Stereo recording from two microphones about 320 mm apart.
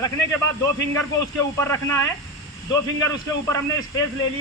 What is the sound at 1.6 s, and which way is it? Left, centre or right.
Speech, centre.